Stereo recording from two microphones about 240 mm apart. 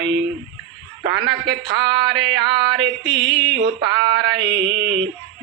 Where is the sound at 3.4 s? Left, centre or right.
Right.